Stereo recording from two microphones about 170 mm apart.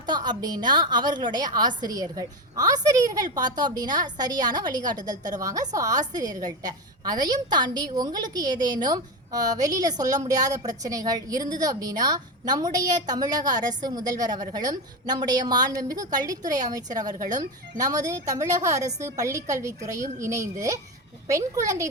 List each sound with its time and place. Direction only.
0.0 s a woman's voice: 25° right (ahead or behind)